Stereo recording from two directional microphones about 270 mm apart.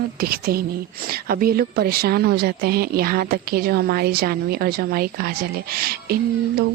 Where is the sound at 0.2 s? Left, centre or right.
Right.